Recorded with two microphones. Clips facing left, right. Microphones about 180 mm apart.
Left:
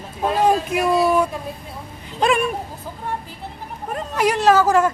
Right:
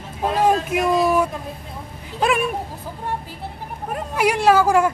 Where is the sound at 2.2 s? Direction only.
5° right (ahead or behind).